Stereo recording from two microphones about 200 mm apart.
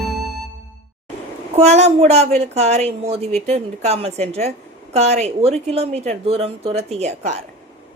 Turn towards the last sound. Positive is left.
turn(degrees=-35)  # may be behind; listen again after turning